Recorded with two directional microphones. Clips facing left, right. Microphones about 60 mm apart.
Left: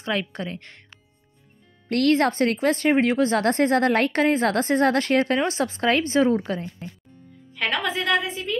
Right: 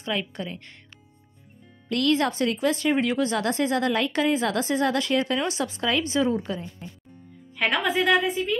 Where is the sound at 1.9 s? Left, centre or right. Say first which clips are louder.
Left 3 dB; left.